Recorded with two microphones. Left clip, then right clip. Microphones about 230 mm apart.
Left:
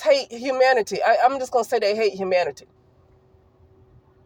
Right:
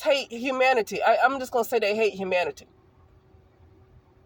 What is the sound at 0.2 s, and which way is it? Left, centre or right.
Speech, left.